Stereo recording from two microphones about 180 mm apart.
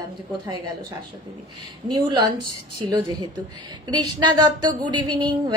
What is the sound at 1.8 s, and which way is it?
Speech, 20° right (ahead or behind).